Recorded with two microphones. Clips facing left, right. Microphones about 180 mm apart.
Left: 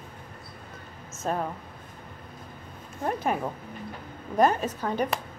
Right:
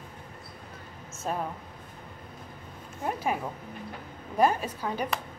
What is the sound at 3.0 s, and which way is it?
Speech, 5° right (ahead or behind).